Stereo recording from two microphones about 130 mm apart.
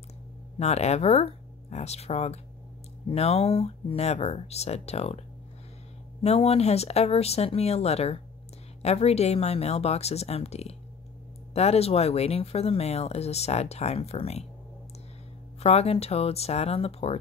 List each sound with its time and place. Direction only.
0.6 s speech: 60° left (ahead or behind)
6.2 s speech: 50° left (ahead or behind)
15.6 s speech: 55° left (ahead or behind)